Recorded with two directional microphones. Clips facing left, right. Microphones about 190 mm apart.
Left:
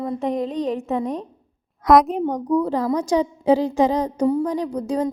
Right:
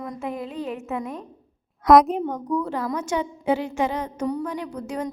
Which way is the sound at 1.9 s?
Centre (ahead or behind).